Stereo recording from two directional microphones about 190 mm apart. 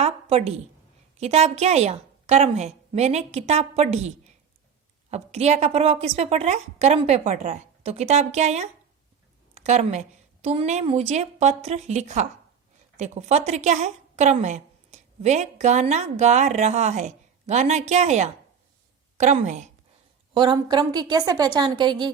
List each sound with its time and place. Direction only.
0.0 s a sound: 30° right (ahead or behind)
1.2 s a woman's voice: 35° right (ahead or behind)
5.1 s a woman's voice: 35° right (ahead or behind)
20.3 s a woman's voice: 25° right (ahead or behind)